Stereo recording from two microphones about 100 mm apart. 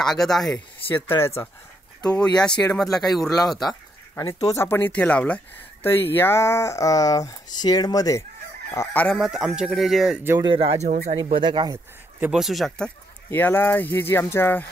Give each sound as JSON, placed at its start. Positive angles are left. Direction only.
{"t": 0.0, "sound": "speech", "side_deg": 5}
{"t": 0.8, "sound": "speech", "side_deg": 25}
{"t": 2.0, "sound": "speech", "side_deg": 10}
{"t": 4.1, "sound": "speech", "side_deg": 30}
{"t": 8.9, "sound": "speech", "side_deg": 10}
{"t": 9.2, "sound": "speech", "side_deg": -5}
{"t": 10.4, "sound": "speech", "side_deg": -65}
{"t": 12.3, "sound": "speech", "side_deg": 0}
{"t": 13.3, "sound": "speech", "side_deg": 20}